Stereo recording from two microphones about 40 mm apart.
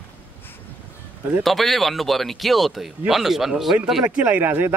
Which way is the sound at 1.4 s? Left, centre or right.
Centre.